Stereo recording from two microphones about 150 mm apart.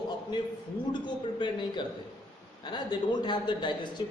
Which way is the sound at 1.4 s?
30° left (ahead or behind).